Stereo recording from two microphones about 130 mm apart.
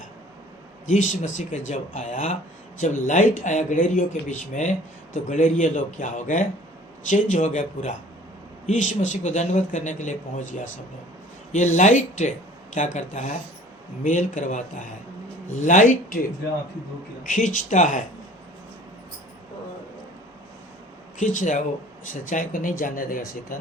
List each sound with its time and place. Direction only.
0.9 s speech: 70° left (ahead or behind)
17.2 s speech: 75° left (ahead or behind)
21.2 s speech: 75° left (ahead or behind)
22.1 s speech: 85° left